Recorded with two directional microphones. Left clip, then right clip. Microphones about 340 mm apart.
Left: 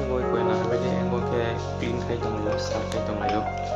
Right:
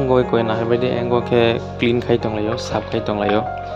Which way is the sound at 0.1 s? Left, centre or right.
Right.